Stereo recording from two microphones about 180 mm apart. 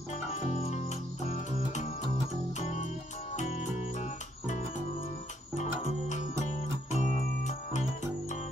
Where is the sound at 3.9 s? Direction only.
40° left (ahead or behind).